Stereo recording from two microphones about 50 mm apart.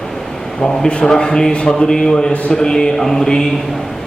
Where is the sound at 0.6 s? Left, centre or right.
Centre.